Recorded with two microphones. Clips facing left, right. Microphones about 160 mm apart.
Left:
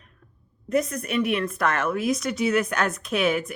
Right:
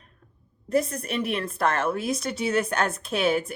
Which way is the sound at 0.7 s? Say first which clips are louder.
Left 1 dB; 30° right (ahead or behind).